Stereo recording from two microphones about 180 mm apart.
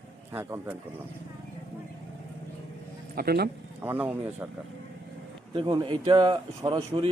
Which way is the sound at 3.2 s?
60° right (ahead or behind).